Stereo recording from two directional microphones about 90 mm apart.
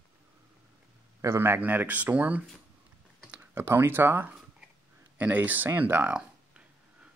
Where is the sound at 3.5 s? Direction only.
25° right (ahead or behind).